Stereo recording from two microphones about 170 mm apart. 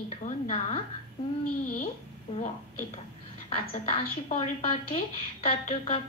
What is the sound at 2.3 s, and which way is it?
A woman's voice, 40° left (ahead or behind).